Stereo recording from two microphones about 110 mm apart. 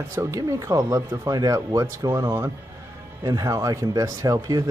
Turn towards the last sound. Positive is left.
turn(degrees=-30)  # may be behind; listen again after turning